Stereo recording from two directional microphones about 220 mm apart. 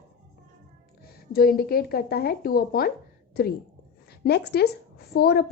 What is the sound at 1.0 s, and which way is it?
A woman's voice, 45° left (ahead or behind).